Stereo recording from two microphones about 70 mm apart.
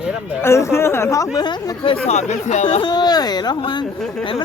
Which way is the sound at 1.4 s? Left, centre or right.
Left.